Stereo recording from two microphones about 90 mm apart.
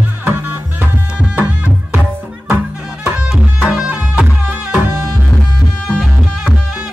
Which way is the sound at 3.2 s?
10° right (ahead or behind).